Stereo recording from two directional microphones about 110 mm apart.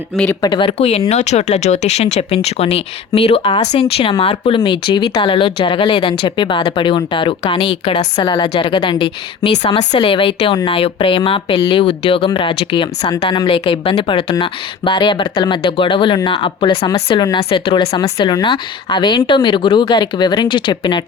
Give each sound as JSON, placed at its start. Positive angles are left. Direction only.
{"t": 0.4, "sound": "speech", "side_deg": 45}
{"t": 1.1, "sound": "speech", "side_deg": 90}
{"t": 3.2, "sound": "speech", "side_deg": 60}